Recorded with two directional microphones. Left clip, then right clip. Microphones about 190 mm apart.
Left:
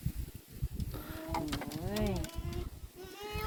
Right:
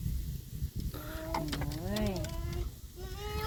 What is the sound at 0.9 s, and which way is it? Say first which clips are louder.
Printer: right 2 dB; centre (ahead or behind).